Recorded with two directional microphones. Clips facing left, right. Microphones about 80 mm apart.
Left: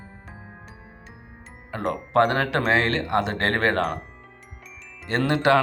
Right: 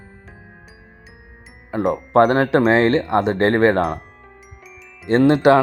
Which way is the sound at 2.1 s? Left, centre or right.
Right.